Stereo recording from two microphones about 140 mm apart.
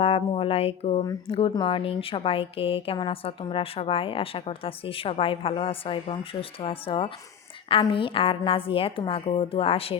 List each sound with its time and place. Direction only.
0.0 s a woman's voice: 45° left (ahead or behind)